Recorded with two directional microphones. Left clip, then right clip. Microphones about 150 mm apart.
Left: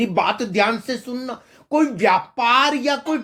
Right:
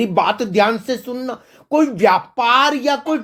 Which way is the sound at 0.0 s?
50° right (ahead or behind).